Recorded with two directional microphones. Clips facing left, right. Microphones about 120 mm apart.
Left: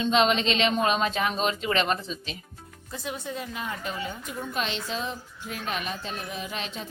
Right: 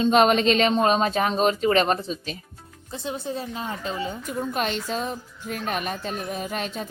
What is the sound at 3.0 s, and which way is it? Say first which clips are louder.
A woman's voice: right 4 dB; 30° right (ahead or behind).